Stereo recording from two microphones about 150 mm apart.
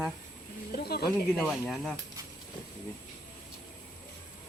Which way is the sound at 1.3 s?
Centre (ahead or behind).